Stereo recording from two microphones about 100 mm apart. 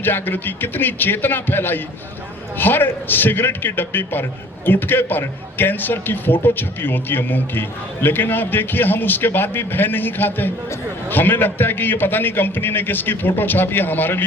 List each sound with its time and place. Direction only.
0.0 s a man's voice: 20° left (ahead or behind)